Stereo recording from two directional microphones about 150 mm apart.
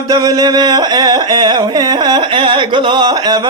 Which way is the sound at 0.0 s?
25° right (ahead or behind).